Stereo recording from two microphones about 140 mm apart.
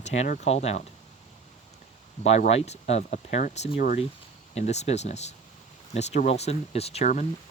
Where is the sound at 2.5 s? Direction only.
50° left (ahead or behind).